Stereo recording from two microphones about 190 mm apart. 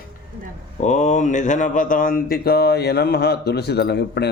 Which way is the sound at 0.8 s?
40° left (ahead or behind).